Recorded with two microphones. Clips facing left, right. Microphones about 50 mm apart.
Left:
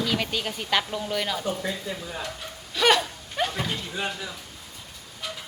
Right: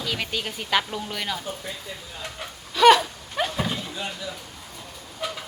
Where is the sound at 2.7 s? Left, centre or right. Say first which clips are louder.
Right 6 dB; centre.